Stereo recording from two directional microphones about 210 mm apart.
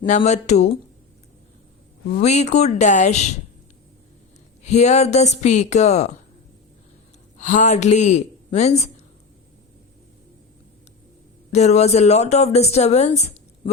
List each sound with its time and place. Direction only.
0.0 s a woman's voice: 35° left (ahead or behind)
2.0 s a woman's voice: 35° left (ahead or behind)
4.6 s a woman's voice: 35° left (ahead or behind)
7.3 s a woman's voice: 35° left (ahead or behind)
11.5 s a woman's voice: 30° left (ahead or behind)